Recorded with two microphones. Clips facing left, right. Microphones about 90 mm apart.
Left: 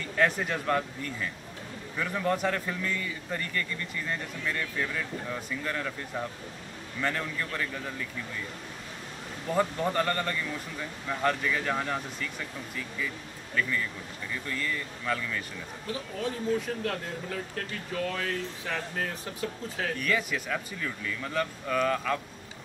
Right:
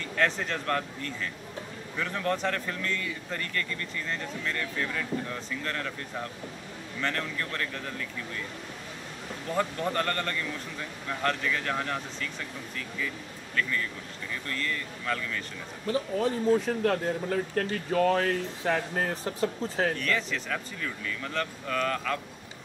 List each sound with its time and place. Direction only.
0.2 s speech: 10° left (ahead or behind)
7.0 s speech: 10° left (ahead or behind)
9.5 s speech: 10° left (ahead or behind)
14.5 s speech: 10° left (ahead or behind)
15.9 s speech: 40° right (ahead or behind)
20.0 s speech: 10° left (ahead or behind)